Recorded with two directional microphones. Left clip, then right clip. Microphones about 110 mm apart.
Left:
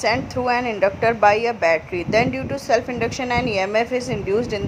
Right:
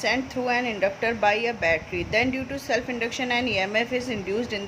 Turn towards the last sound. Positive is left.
turn(degrees=40)  # may be behind; listen again after turning